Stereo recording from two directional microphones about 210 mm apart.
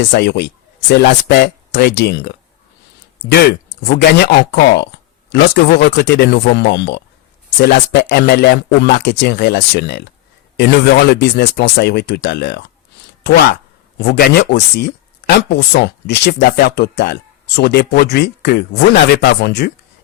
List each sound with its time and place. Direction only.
0.0 s speech: 50° left (ahead or behind)
14.0 s speech: 50° left (ahead or behind)